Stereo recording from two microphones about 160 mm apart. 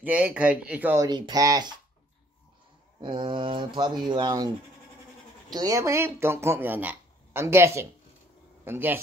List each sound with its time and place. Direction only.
0.0 s speech: 10° right (ahead or behind)
1.0 s speech: 25° right (ahead or behind)
3.0 s speech: 30° right (ahead or behind)
5.5 s speech: 25° right (ahead or behind)